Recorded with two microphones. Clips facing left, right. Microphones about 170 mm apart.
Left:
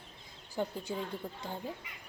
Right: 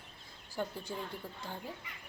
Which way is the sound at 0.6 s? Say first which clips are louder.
Left 3 dB; 15° left (ahead or behind).